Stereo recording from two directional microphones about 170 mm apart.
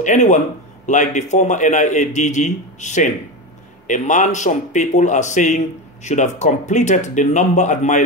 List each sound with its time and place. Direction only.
0.0 s a man's voice: 45° left (ahead or behind)